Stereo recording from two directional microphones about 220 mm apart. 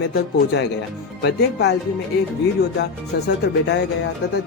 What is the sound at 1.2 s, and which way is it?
Speech, 50° left (ahead or behind).